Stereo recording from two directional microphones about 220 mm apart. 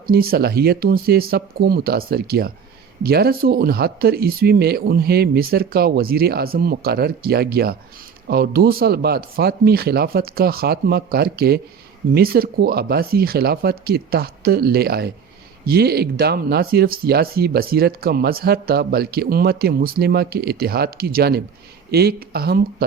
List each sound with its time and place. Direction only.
0.1 s speech: 45° right (ahead or behind)